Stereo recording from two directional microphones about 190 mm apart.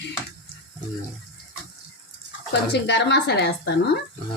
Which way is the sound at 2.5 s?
60° left (ahead or behind).